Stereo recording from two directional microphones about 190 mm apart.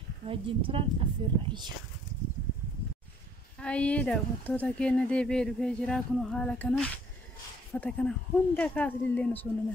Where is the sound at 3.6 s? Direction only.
5° left (ahead or behind).